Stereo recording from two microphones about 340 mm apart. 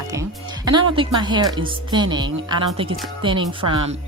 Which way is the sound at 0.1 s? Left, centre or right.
Centre.